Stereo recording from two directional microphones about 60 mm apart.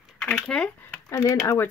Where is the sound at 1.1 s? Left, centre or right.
Left.